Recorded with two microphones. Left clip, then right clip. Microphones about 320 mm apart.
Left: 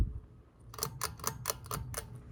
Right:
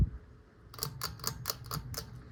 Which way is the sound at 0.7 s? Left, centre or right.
Left.